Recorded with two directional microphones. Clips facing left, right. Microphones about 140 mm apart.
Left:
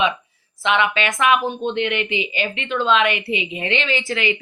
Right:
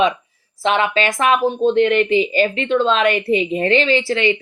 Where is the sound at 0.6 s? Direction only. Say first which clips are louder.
Right 3 dB; 35° right (ahead or behind).